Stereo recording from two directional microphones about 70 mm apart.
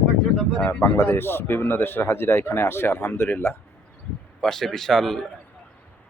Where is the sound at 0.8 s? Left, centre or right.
Left.